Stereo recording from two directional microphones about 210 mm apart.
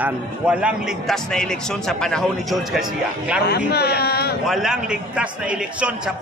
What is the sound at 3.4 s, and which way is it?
Speech, 50° left (ahead or behind).